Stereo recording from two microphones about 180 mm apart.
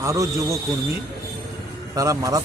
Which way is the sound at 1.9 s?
20° right (ahead or behind).